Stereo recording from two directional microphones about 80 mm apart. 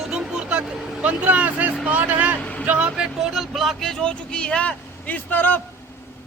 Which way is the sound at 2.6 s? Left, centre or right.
Centre.